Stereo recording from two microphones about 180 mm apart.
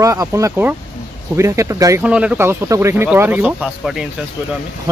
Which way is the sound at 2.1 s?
5° right (ahead or behind).